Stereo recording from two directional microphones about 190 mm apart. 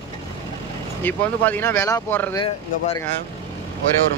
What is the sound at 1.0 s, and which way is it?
Speech, 10° left (ahead or behind).